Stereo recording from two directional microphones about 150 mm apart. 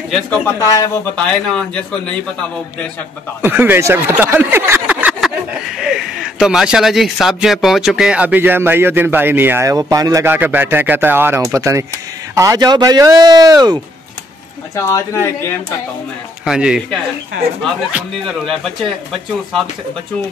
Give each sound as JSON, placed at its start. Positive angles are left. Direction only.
{"t": 0.6, "sound": "speech", "side_deg": 20}
{"t": 1.1, "sound": "a man's voice", "side_deg": 5}
{"t": 3.4, "sound": "speech", "side_deg": -15}
{"t": 14.8, "sound": "a man's voice", "side_deg": 20}
{"t": 16.4, "sound": "speech", "side_deg": -5}
{"t": 17.9, "sound": "speech", "side_deg": 0}